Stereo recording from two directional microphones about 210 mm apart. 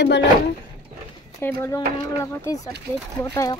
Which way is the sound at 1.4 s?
10° left (ahead or behind).